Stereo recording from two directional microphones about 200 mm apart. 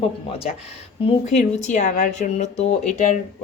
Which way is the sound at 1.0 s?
30° left (ahead or behind).